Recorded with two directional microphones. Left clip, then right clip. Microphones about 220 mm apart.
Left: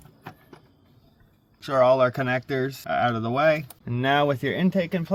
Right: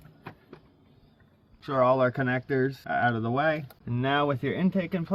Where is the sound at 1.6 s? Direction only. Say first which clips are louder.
Left 4 dB; 55° left (ahead or behind).